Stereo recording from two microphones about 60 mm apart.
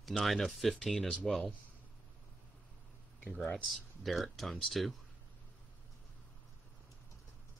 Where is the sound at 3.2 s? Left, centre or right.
Centre.